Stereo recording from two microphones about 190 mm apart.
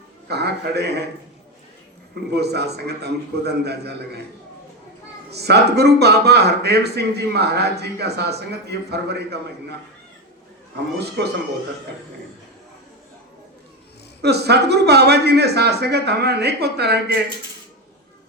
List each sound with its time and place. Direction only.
0.3 s a man's voice: 60° right (ahead or behind)
2.3 s a man's voice: 60° right (ahead or behind)
5.3 s a man's voice: 60° right (ahead or behind)
10.9 s a man's voice: 60° right (ahead or behind)
14.2 s a man's voice: 60° right (ahead or behind)